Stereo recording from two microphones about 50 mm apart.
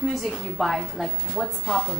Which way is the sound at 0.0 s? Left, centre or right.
Centre.